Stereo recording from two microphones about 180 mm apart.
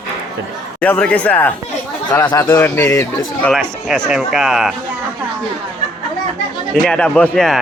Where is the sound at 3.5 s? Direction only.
Centre (ahead or behind).